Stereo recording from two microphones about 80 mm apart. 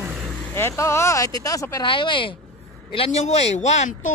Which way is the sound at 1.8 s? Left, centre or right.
Left.